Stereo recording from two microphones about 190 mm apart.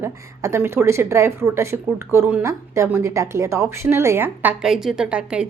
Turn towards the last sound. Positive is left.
turn(degrees=-5)  # may be behind; listen again after turning